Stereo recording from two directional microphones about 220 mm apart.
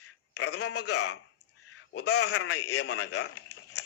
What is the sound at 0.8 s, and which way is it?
Speech, 90° left.